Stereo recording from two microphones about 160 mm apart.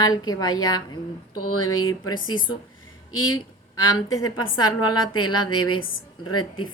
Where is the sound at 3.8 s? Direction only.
25° left (ahead or behind).